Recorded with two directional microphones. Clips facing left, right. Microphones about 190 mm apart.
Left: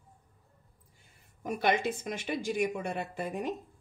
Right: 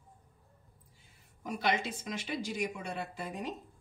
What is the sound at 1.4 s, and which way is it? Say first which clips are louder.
A woman's voice: left 4 dB; 55° left (ahead or behind).